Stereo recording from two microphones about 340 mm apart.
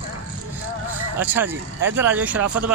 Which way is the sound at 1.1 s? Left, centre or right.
Centre.